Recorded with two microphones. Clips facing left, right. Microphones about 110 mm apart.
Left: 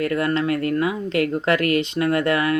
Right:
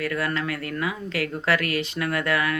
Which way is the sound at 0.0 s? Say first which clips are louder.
Left 6 dB; 25° left (ahead or behind).